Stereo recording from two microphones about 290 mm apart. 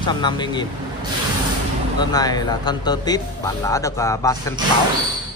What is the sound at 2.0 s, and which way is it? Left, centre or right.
Speech, centre.